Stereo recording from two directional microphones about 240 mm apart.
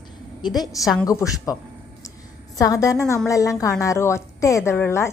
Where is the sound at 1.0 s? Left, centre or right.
Centre.